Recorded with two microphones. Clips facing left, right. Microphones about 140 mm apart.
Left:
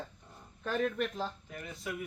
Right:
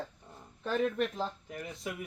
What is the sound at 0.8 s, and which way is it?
Speech, 20° right (ahead or behind).